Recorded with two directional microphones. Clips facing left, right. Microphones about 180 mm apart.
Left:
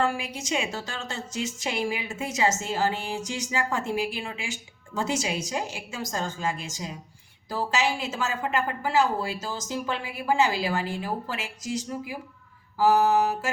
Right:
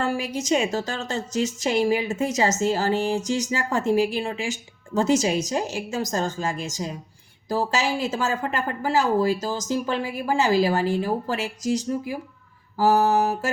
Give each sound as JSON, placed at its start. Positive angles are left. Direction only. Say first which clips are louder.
{"t": 0.0, "sound": "a woman's voice", "louder": "right 2 dB", "side_deg": -40}